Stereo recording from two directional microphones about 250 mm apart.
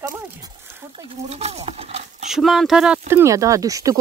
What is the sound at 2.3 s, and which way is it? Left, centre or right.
Speech, centre.